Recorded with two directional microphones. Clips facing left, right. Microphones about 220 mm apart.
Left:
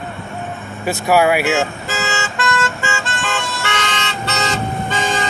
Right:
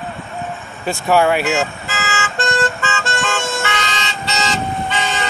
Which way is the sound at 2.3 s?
30° right (ahead or behind).